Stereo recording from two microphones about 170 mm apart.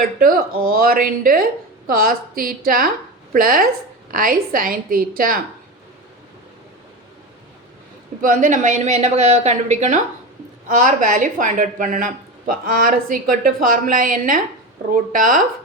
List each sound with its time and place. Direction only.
0.2 s a woman's voice: 55° right (ahead or behind)
8.2 s a woman's voice: 50° right (ahead or behind)